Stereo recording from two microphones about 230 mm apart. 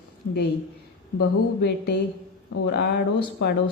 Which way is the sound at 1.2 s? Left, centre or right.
Left.